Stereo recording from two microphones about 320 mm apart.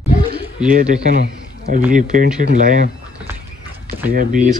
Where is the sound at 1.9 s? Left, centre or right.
Right.